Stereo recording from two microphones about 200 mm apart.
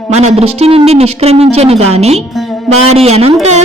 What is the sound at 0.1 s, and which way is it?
A woman's voice, 30° right (ahead or behind).